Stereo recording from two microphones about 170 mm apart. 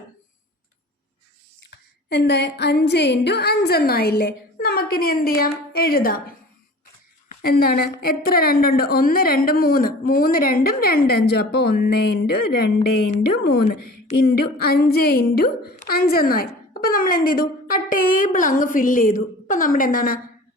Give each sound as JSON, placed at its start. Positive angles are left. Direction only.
{"t": 2.0, "sound": "a woman's voice", "side_deg": 85}
{"t": 7.4, "sound": "a child's voice", "side_deg": 60}